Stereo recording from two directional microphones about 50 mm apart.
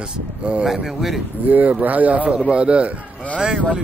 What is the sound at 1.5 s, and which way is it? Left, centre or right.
A man's voice, right.